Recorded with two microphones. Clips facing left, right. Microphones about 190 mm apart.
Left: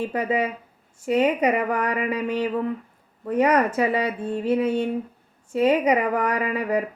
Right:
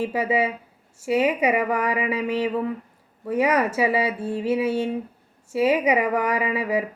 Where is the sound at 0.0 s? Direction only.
10° right (ahead or behind).